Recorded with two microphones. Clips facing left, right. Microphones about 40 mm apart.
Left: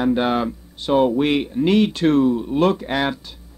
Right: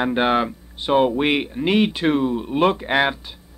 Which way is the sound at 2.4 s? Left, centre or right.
Right.